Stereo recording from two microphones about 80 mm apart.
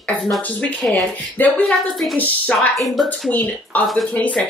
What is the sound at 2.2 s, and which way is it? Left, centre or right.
Speech, left.